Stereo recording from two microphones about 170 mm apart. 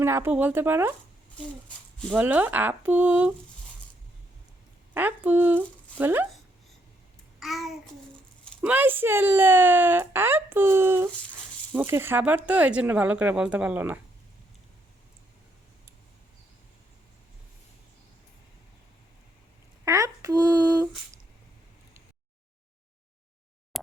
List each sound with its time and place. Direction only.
0.0 s speech: 15° right (ahead or behind)
1.6 s a sound: 5° left (ahead or behind)
2.1 s speech: 10° right (ahead or behind)
4.9 s speech: 10° right (ahead or behind)
7.3 s babbling: centre (ahead or behind)
8.6 s speech: 10° right (ahead or behind)
19.8 s speech: 20° right (ahead or behind)
23.7 s a sound: centre (ahead or behind)